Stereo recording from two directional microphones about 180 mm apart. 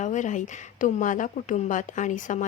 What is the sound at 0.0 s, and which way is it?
Speech, 45° left (ahead or behind).